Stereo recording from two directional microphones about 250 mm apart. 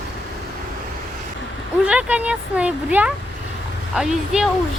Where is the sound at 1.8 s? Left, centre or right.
Centre.